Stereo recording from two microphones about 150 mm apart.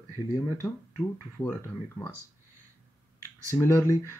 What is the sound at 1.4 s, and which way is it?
Speech, 10° left (ahead or behind).